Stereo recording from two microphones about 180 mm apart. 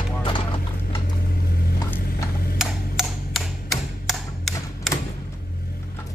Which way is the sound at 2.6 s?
Centre (ahead or behind).